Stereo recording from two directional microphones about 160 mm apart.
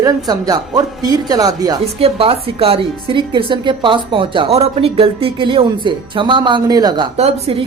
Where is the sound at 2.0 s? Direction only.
35° right (ahead or behind).